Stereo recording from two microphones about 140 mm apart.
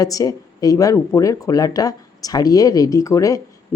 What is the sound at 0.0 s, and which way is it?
Speech, 25° left (ahead or behind).